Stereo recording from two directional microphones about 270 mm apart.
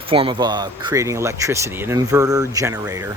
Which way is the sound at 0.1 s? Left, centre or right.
Centre.